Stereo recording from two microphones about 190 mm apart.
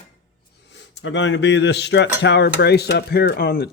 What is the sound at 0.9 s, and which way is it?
Speech, 70° left (ahead or behind).